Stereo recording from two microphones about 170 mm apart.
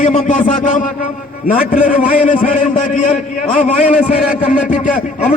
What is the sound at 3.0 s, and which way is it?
A man's voice, 50° left (ahead or behind).